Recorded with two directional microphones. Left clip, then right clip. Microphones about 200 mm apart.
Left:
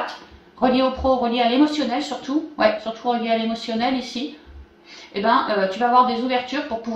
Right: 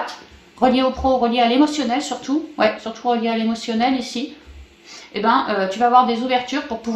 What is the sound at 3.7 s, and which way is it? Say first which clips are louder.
Speech: right 5 dB; 45° right (ahead or behind).